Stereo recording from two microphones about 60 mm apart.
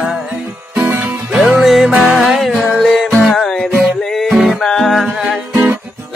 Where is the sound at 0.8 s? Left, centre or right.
Right.